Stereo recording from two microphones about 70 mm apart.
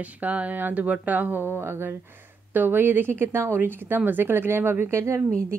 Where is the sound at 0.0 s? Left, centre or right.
Centre.